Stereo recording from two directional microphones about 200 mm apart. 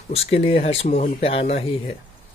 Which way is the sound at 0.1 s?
30° left (ahead or behind).